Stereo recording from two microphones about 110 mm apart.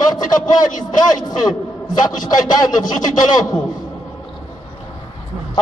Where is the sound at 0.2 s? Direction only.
35° left (ahead or behind).